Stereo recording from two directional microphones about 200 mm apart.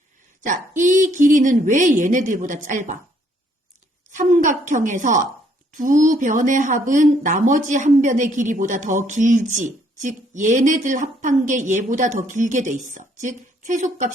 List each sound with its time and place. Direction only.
0.4 s a woman's voice: 40° right (ahead or behind)
4.1 s a woman's voice: 40° right (ahead or behind)